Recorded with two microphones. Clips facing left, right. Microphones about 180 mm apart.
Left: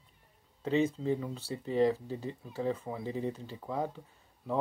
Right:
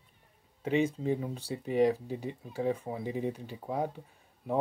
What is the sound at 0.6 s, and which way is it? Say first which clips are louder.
Speech: right 1 dB; 15° right (ahead or behind).